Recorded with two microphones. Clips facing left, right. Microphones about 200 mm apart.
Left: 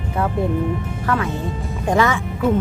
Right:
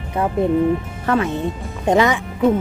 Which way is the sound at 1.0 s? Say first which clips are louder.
Right 4 dB; 25° right (ahead or behind).